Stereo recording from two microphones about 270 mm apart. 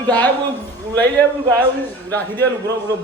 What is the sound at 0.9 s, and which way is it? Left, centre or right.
A man's voice, centre.